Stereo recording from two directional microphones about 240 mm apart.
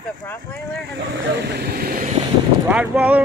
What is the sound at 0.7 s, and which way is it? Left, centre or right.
Speech, right.